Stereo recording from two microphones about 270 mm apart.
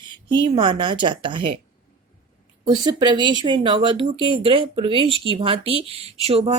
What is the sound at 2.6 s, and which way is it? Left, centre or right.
Speech, centre.